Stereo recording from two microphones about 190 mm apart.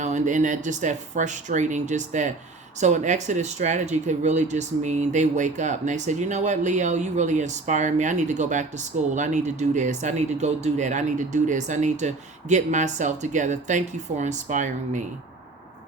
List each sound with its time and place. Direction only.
0.0 s speech: 40° right (ahead or behind)